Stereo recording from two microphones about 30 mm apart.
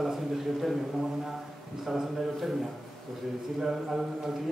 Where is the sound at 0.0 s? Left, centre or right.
Centre.